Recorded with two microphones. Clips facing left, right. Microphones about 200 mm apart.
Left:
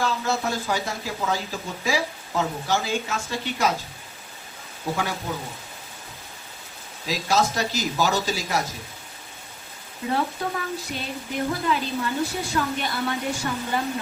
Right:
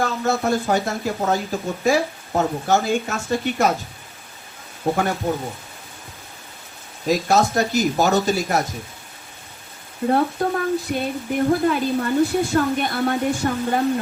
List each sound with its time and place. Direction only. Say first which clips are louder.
0.0 s speech: right 4 dB; 50° right (ahead or behind)
4.9 s speech: right 7 dB; 55° right (ahead or behind)
7.0 s speech: right 5 dB; 50° right (ahead or behind)
10.1 s speech: right 6 dB; 50° right (ahead or behind)